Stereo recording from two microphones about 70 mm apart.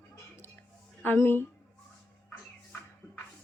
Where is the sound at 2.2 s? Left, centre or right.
Centre.